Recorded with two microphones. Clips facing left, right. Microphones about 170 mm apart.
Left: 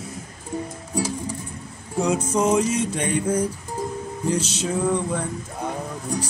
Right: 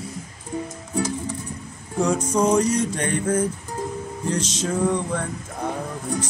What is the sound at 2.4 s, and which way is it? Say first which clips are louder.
Music: right 2 dB; 5° left (ahead or behind).